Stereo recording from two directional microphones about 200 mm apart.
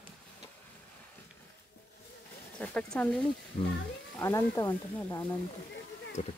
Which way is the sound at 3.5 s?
35° left (ahead or behind).